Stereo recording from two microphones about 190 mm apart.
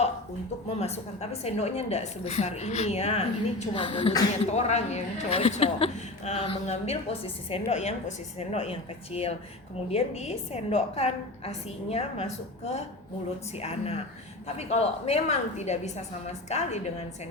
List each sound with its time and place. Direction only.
0.8 s a woman's voice: 35° left (ahead or behind)